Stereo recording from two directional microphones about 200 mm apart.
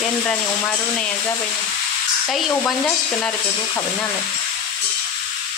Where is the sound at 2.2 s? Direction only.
5° left (ahead or behind).